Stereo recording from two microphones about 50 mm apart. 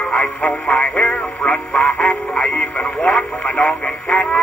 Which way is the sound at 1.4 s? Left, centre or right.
Centre.